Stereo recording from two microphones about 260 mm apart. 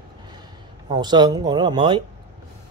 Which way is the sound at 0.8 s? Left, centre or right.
Centre.